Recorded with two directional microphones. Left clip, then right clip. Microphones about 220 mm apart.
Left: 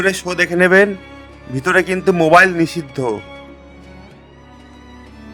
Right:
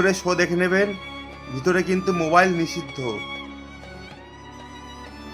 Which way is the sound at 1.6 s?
40° left (ahead or behind).